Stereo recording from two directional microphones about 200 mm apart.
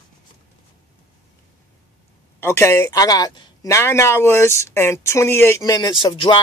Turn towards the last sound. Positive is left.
turn(degrees=25)  # may be behind; listen again after turning